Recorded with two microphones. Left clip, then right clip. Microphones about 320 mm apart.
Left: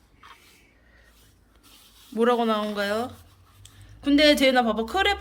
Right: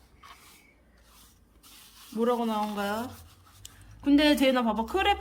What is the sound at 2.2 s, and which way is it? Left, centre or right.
Speech, centre.